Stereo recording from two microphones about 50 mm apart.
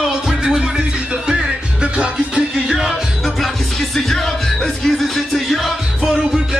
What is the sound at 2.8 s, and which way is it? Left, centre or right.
Music, centre.